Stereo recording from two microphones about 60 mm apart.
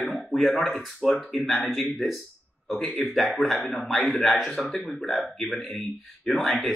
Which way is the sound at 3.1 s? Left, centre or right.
Centre.